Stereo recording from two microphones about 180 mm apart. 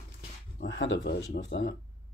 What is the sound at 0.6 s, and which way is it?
Speech, 85° left.